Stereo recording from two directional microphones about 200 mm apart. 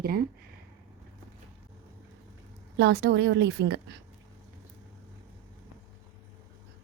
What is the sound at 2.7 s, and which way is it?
A woman's voice, 55° right (ahead or behind).